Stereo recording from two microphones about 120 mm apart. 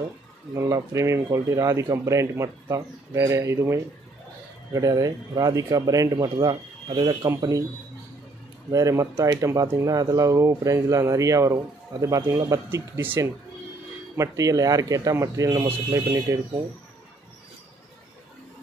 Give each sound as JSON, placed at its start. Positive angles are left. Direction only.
{"t": 0.6, "sound": "speech", "side_deg": -25}
{"t": 8.6, "sound": "speech", "side_deg": -30}